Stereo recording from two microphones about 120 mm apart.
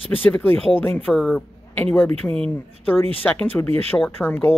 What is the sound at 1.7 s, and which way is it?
Speech, 15° left (ahead or behind).